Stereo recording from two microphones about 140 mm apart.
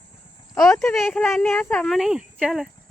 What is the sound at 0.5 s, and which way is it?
Speech, 5° left (ahead or behind).